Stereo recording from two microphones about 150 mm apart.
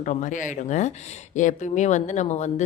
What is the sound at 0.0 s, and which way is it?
Speech, 55° left (ahead or behind).